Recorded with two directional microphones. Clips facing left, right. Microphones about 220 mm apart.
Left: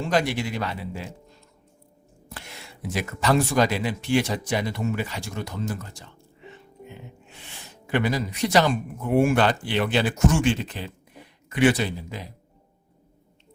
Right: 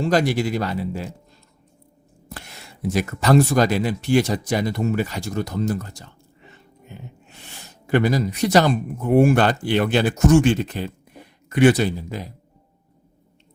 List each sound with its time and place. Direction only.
0.0 s speech: 40° right (ahead or behind)
2.8 s speech: 40° right (ahead or behind)
7.9 s speech: 40° right (ahead or behind)